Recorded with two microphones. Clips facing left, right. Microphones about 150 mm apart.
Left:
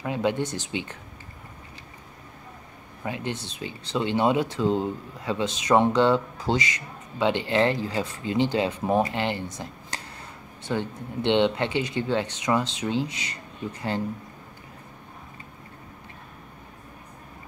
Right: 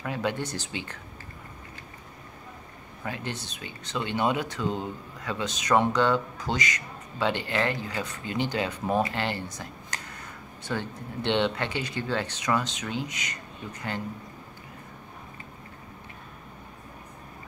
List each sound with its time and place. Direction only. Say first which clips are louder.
0.0 s speech: left 4 dB; 20° left (ahead or behind)
3.0 s speech: left 3 dB; 20° left (ahead or behind)